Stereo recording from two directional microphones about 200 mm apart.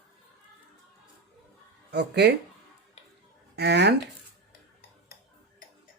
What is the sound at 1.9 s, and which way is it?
Speech, 55° right (ahead or behind).